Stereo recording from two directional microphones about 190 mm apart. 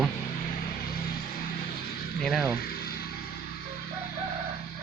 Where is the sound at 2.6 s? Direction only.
55° left (ahead or behind).